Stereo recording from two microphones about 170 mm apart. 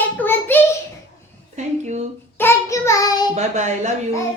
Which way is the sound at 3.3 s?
45° right (ahead or behind).